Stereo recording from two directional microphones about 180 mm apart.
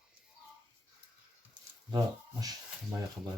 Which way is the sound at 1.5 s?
20° right (ahead or behind).